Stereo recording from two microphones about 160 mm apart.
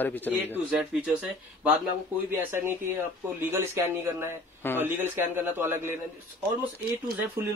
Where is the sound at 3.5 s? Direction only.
15° right (ahead or behind).